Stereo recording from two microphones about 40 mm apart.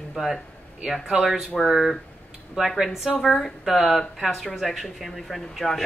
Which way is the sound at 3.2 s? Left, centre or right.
Centre.